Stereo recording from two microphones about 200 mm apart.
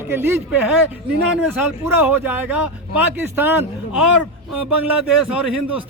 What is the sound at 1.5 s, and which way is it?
Speech, 10° right (ahead or behind).